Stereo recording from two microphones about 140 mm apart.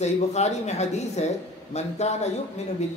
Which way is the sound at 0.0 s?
50° left (ahead or behind).